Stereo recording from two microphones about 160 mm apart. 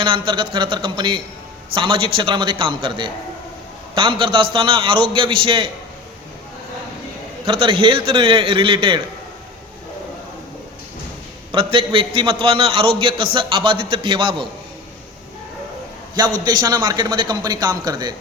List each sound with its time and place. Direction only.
0.0 s a man's voice: 30° right (ahead or behind)
7.4 s a man's voice: 35° right (ahead or behind)
11.5 s a man's voice: 35° right (ahead or behind)
16.4 s speech: 25° right (ahead or behind)